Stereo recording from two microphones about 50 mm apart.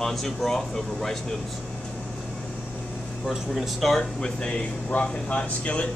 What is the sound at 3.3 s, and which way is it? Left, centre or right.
Speech, centre.